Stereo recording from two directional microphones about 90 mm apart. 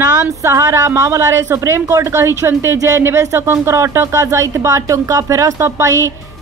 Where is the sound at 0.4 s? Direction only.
30° right (ahead or behind).